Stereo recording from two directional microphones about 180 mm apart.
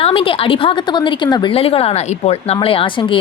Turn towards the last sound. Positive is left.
turn(degrees=30)  # may be behind; listen again after turning